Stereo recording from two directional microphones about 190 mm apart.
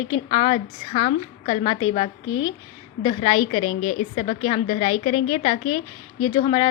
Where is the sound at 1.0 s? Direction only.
30° left (ahead or behind).